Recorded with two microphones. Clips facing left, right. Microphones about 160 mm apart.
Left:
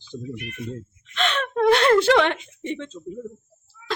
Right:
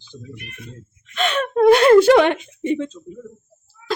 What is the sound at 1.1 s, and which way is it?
A woman's voice, 10° right (ahead or behind).